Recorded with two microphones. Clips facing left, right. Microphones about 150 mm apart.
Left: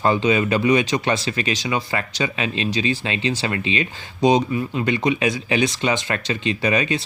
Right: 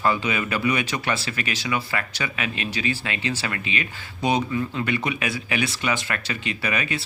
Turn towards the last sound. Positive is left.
turn(degrees=25)  # may be behind; listen again after turning